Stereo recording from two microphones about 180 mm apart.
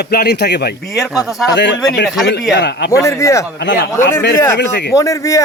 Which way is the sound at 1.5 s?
75° left (ahead or behind).